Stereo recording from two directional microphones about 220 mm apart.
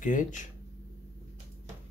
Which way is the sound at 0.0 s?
35° left (ahead or behind).